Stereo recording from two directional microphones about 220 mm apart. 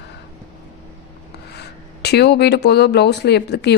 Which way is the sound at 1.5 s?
50° left (ahead or behind).